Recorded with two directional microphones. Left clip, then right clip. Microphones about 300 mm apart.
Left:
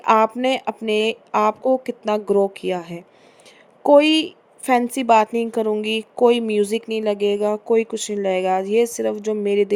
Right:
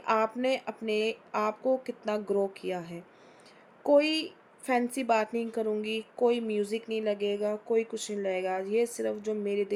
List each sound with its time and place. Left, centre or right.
0.0 s a woman's voice: left